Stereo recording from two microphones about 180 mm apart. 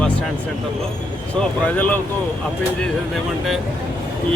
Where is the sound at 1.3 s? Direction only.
10° left (ahead or behind).